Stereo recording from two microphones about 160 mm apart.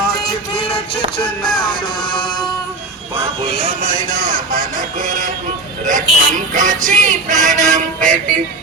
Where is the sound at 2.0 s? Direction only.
30° left (ahead or behind).